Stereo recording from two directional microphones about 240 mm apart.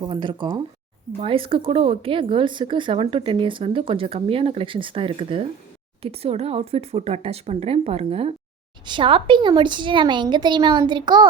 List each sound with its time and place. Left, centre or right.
0.0 s speech: centre